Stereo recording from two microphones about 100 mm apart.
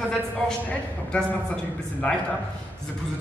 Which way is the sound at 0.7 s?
10° left (ahead or behind).